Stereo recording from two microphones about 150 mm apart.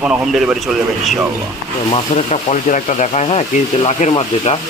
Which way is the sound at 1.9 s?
50° left (ahead or behind).